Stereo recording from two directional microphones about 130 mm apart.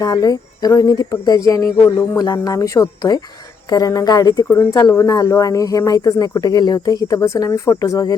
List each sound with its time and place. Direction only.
0.0 s speech: 25° left (ahead or behind)